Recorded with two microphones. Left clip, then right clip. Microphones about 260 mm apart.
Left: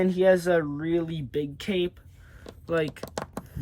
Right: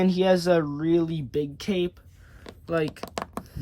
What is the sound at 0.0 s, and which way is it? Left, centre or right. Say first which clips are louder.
Speech: left 1 dB; centre.